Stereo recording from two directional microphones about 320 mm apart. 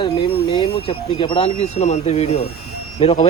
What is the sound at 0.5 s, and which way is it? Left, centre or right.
Speech, centre.